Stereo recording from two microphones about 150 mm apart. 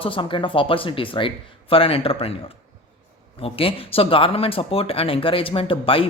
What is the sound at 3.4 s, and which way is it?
Speech, 40° left (ahead or behind).